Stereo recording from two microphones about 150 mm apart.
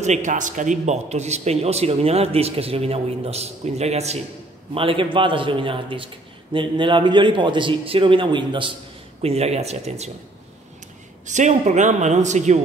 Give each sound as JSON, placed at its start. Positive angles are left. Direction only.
{"t": 0.0, "sound": "a man's voice", "side_deg": -55}
{"t": 4.7, "sound": "a man's voice", "side_deg": -35}
{"t": 9.2, "sound": "a man's voice", "side_deg": -45}
{"t": 11.2, "sound": "a man's voice", "side_deg": -55}